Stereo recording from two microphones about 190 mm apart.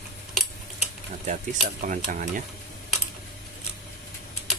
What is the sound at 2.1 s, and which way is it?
Speech, 45° right (ahead or behind).